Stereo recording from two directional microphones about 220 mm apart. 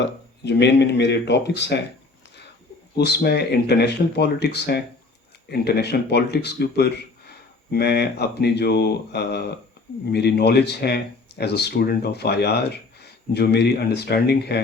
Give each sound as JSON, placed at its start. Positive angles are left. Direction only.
{"t": 0.4, "sound": "speech", "side_deg": 50}
{"t": 2.9, "sound": "speech", "side_deg": 50}